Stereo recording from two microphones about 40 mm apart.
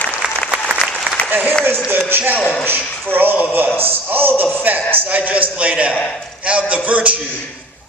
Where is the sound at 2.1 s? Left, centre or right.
Right.